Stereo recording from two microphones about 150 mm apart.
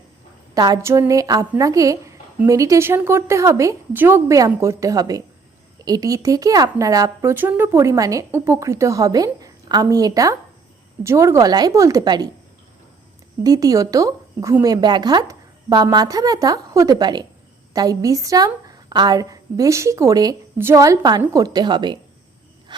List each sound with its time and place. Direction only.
0.5 s a woman's voice: 25° right (ahead or behind)
13.4 s a woman's voice: 25° right (ahead or behind)